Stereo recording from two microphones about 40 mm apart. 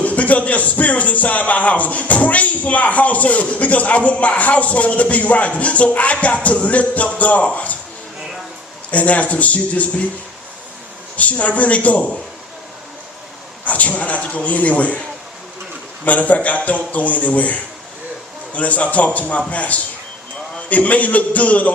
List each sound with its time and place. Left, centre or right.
0.0 s a man's voice: left
8.9 s a man's voice: left
11.2 s a man's voice: left
13.7 s a man's voice: left
16.0 s a man's voice: left